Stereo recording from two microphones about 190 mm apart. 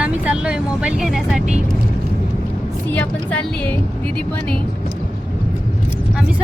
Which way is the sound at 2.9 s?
5° left (ahead or behind).